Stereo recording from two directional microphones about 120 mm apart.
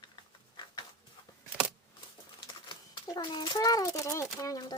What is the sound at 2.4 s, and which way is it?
A child's voice, 40° left (ahead or behind).